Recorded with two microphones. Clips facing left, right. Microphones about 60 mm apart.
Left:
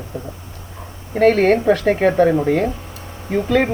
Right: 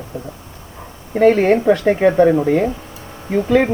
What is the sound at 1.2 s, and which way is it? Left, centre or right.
Speech, centre.